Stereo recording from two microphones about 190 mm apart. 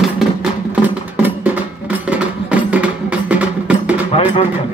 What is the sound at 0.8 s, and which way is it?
Music, 10° right (ahead or behind).